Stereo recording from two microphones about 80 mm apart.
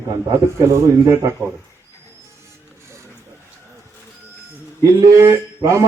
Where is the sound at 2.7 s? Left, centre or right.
Right.